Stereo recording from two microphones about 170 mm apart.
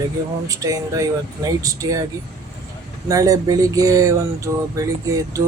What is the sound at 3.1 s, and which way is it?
Speech, 20° right (ahead or behind).